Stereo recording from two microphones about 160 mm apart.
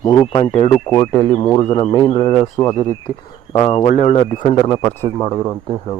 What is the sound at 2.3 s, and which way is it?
Speech, 15° left (ahead or behind).